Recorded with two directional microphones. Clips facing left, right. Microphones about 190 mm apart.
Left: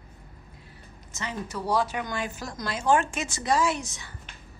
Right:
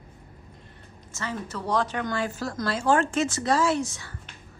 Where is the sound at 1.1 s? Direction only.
15° left (ahead or behind).